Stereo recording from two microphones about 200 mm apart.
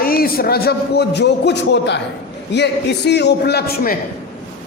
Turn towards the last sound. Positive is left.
turn(degrees=50)  # may be behind; listen again after turning